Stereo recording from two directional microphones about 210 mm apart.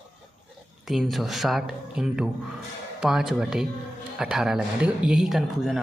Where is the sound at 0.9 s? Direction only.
Centre (ahead or behind).